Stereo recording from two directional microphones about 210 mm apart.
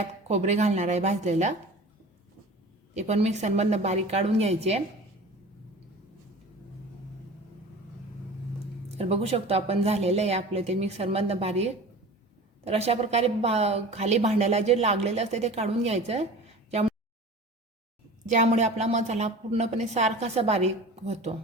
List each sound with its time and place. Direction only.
0.0 s a woman's voice: 30° right (ahead or behind)
2.9 s a woman's voice: 30° right (ahead or behind)
9.0 s a woman's voice: 30° right (ahead or behind)
18.3 s a woman's voice: 35° right (ahead or behind)